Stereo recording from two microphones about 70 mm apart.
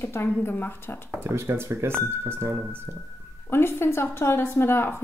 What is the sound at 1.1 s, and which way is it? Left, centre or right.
Speech, right.